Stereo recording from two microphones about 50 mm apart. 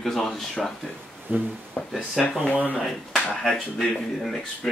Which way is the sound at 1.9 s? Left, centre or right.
Centre.